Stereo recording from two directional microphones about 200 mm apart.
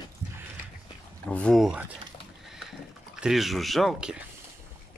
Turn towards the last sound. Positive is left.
turn(degrees=0)  # may be behind; listen again after turning